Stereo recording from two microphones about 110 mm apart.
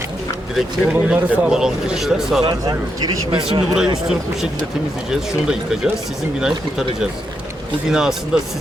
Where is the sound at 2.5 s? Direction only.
35° right (ahead or behind).